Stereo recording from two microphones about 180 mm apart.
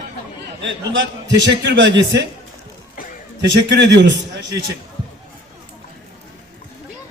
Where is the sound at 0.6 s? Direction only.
90° right.